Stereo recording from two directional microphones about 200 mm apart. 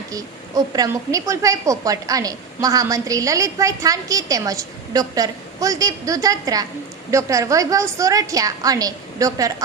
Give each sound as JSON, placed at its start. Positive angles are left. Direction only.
{"t": 0.1, "sound": "a woman's voice", "side_deg": -20}